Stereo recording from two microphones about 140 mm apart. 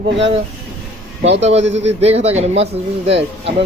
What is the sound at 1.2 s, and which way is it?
A man's voice, 50° right (ahead or behind).